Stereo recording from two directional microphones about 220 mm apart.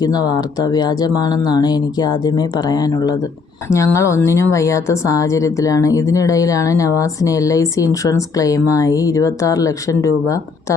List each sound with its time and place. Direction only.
0.0 s a woman's voice: 15° left (ahead or behind)